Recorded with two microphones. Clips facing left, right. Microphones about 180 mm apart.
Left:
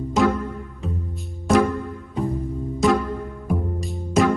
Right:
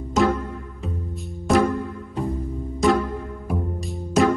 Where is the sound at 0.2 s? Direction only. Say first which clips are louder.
Even; centre (ahead or behind).